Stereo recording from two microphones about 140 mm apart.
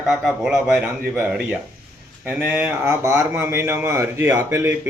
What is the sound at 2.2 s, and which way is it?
A man's voice, 10° right (ahead or behind).